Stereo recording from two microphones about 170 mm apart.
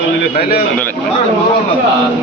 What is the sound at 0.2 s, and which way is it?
Speech, 65° left (ahead or behind).